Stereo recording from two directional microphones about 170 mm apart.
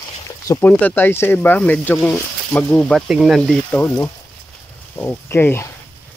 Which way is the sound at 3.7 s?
15° left (ahead or behind).